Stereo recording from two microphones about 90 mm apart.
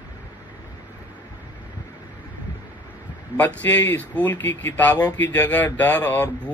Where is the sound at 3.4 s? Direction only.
20° left (ahead or behind).